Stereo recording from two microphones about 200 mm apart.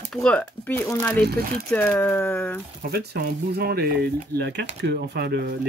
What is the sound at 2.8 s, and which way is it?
Speech, 50° right (ahead or behind).